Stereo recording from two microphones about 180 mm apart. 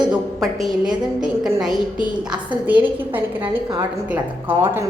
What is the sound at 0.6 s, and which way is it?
Speech, 5° right (ahead or behind).